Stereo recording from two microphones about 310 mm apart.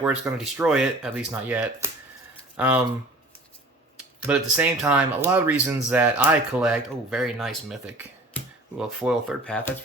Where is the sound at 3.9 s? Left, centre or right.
Centre.